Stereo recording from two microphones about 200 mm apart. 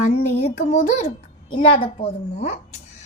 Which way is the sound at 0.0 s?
35° left (ahead or behind).